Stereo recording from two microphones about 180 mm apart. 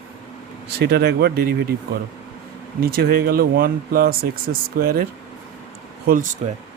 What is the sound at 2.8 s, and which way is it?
Speech, 60° right (ahead or behind).